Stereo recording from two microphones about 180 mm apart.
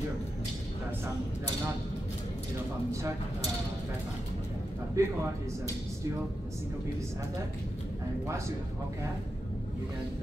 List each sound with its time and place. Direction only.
5.0 s a man's voice: 20° right (ahead or behind)